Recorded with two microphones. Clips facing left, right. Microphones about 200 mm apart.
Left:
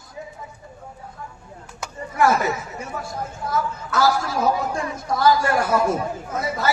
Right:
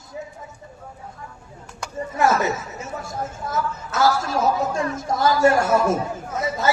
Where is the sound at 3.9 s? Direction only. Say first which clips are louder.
Even; 25° right (ahead or behind).